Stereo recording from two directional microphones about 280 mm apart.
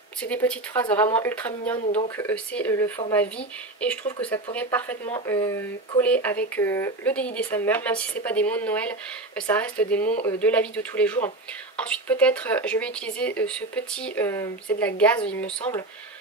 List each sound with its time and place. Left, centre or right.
0.2 s speech: centre